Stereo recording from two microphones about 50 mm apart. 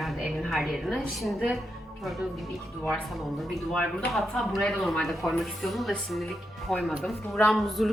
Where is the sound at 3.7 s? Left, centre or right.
Centre.